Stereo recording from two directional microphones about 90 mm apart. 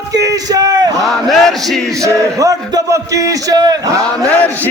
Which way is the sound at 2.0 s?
35° right (ahead or behind).